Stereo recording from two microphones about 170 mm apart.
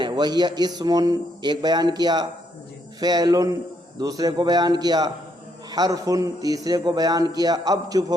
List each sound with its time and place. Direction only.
0.0 s speech: 25° right (ahead or behind)